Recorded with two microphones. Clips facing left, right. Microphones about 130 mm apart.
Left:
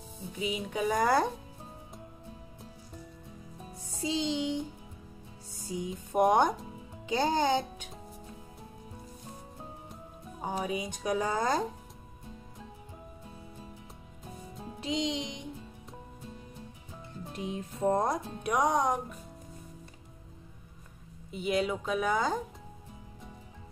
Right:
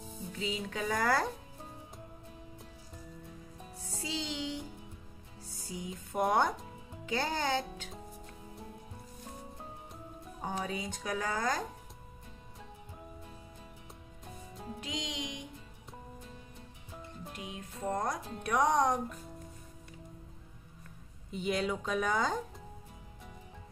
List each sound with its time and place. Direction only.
0.3 s speech: 15° left (ahead or behind)
3.9 s music: 20° left (ahead or behind)
5.6 s a child's voice: 20° left (ahead or behind)
10.4 s a woman's voice: 10° left (ahead or behind)
14.8 s a woman's voice: 25° left (ahead or behind)
17.3 s speech: 30° left (ahead or behind)
18.4 s speech: 15° left (ahead or behind)
21.3 s speech: 5° left (ahead or behind)